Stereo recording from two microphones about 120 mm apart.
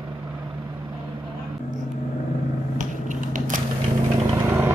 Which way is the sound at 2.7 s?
90° right.